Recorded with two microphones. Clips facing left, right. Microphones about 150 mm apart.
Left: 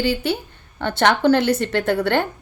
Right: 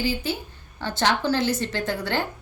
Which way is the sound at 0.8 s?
60° left (ahead or behind).